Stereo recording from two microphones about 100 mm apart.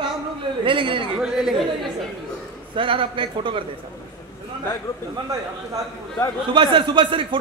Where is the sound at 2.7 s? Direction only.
60° right (ahead or behind).